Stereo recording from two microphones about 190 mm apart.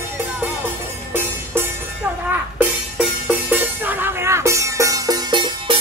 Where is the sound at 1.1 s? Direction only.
10° right (ahead or behind).